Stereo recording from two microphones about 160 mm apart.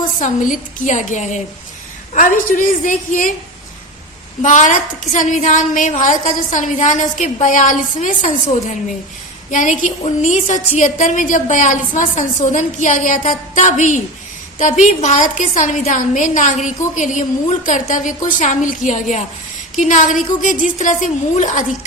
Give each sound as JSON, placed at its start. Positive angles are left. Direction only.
{"t": 0.0, "sound": "a woman's voice", "side_deg": 55}
{"t": 4.4, "sound": "a woman's voice", "side_deg": 50}